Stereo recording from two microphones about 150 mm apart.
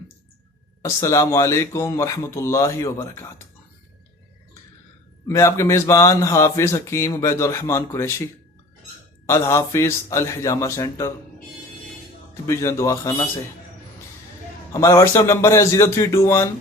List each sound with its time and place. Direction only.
0.8 s speech: 20° left (ahead or behind)
5.3 s speech: 20° left (ahead or behind)
9.2 s speech: 20° left (ahead or behind)
12.5 s speech: 20° left (ahead or behind)
14.7 s speech: 20° left (ahead or behind)